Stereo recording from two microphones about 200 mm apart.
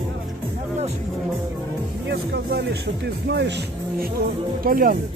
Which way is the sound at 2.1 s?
55° right (ahead or behind).